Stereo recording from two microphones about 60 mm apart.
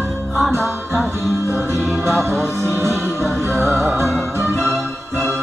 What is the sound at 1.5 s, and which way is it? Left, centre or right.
Music, right.